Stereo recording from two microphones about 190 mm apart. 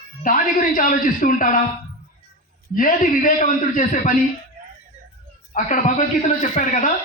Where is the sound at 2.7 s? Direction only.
45° left (ahead or behind).